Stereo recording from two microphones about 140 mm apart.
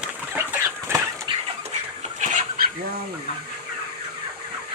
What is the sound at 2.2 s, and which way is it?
Chicken, 65° right (ahead or behind).